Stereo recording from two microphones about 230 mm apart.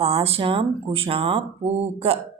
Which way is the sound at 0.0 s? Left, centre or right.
Right.